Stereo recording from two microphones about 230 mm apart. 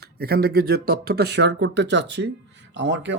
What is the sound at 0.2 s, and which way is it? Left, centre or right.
Speech, right.